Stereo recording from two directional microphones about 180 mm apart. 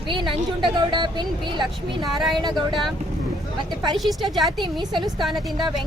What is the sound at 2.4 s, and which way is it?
Speech, 25° right (ahead or behind).